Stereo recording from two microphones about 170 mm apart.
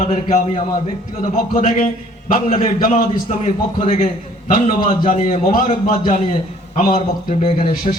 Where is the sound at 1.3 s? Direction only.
50° left (ahead or behind).